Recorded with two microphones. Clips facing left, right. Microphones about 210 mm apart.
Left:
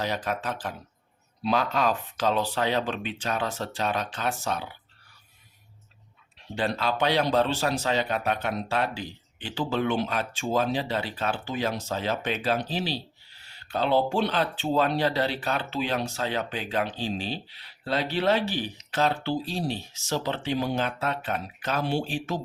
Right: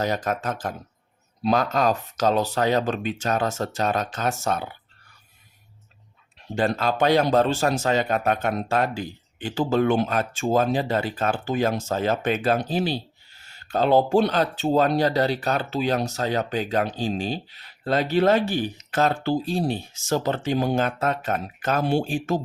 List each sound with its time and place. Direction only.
0.0 s speech: 45° right (ahead or behind)
6.6 s speech: 45° right (ahead or behind)